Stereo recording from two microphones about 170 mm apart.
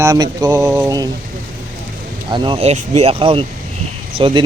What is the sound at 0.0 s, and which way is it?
Speech, 20° right (ahead or behind).